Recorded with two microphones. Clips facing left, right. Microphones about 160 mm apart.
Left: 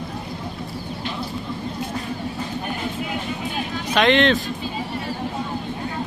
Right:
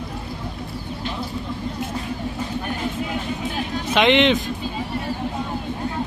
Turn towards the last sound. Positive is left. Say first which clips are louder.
# right 1 dB
turn(degrees=-20)  # may be behind; listen again after turning